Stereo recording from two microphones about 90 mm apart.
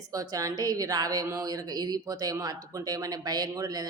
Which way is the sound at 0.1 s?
40° right (ahead or behind).